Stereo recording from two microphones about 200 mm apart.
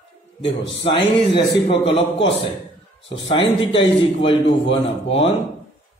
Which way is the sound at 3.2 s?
25° left (ahead or behind).